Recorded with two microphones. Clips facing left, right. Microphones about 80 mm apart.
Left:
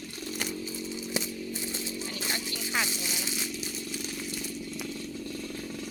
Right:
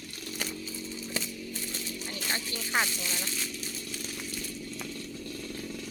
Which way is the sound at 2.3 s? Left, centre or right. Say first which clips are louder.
Right 3 dB; right.